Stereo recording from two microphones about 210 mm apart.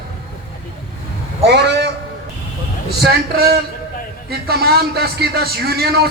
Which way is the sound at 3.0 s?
50° right (ahead or behind).